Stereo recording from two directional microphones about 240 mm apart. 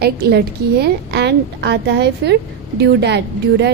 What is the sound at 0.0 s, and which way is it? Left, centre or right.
A woman's voice, right.